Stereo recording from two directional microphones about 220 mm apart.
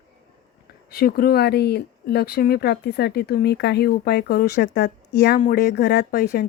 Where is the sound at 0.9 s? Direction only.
45° left (ahead or behind).